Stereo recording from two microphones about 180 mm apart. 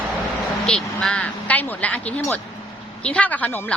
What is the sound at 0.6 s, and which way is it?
A woman's voice, 5° left (ahead or behind).